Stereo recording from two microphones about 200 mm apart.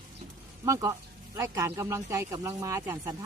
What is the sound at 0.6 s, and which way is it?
A man's voice, 15° right (ahead or behind).